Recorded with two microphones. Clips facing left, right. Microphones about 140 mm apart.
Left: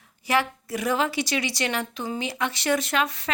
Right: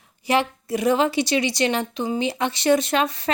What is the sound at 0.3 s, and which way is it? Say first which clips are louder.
A woman's voice: right 3 dB; 25° right (ahead or behind).